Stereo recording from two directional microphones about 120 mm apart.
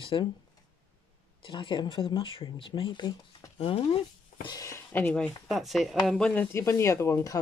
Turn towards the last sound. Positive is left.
turn(degrees=25)  # may be behind; listen again after turning